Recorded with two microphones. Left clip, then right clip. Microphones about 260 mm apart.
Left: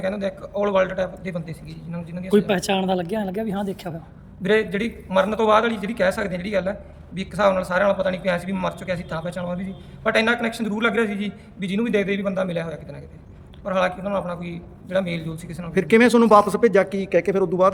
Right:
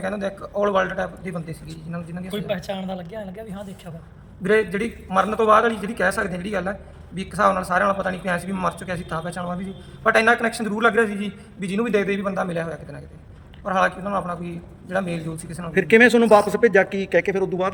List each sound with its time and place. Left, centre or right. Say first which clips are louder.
0.0 s a man's voice: left 1 dB; centre
2.3 s speech: left 8 dB; left
4.4 s a man's voice: right 1 dB; centre